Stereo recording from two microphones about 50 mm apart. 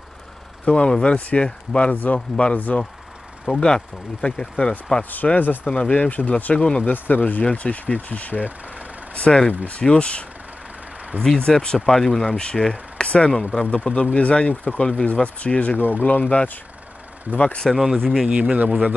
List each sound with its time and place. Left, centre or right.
0.7 s speech: centre
2.0 s speech: left
3.5 s speech: centre
5.1 s speech: left
6.5 s speech: centre
6.8 s speech: left
11.2 s speech: centre
12.9 s speech: left
14.8 s speech: centre
15.2 s speech: left
17.9 s speech: centre
18.3 s speech: right